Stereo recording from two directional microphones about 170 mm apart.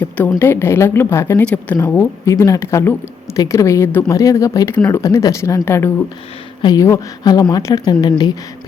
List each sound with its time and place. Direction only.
0.3 s speech: 15° left (ahead or behind)